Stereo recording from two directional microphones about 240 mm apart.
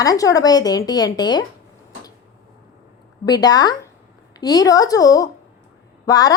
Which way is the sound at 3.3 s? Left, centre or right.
Centre.